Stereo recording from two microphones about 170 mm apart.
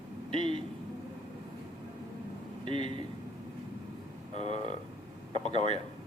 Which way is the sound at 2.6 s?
30° right (ahead or behind).